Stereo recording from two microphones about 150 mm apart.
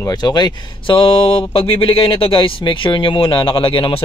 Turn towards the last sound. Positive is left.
turn(degrees=35)  # may be behind; listen again after turning